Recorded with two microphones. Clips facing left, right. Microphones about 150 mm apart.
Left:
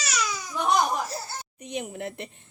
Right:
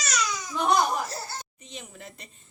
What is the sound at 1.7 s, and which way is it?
Speech, 60° left (ahead or behind).